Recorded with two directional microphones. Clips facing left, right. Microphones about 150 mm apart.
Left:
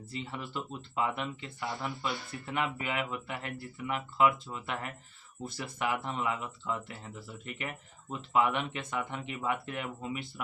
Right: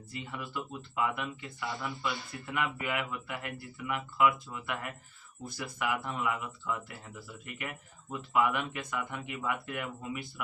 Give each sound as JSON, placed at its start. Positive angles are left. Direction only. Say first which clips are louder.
{"t": 0.1, "sound": "speech", "louder": "left 1 dB", "side_deg": 25}